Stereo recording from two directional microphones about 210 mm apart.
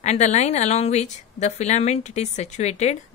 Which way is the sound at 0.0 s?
35° left (ahead or behind).